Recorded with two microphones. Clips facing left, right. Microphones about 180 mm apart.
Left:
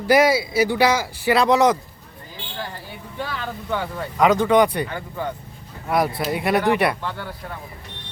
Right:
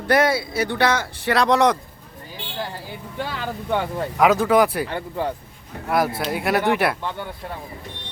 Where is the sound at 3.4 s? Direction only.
25° right (ahead or behind).